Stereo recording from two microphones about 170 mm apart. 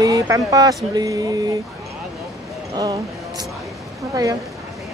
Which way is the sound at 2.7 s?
20° right (ahead or behind).